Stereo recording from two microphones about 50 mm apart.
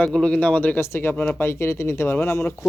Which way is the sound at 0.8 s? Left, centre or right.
Left.